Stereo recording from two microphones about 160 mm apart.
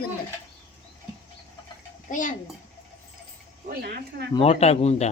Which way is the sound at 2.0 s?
55° left (ahead or behind).